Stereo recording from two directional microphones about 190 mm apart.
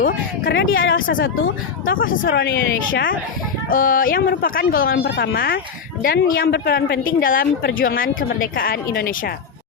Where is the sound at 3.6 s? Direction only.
50° left (ahead or behind).